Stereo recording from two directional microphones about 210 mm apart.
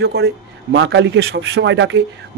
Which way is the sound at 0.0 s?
50° right (ahead or behind).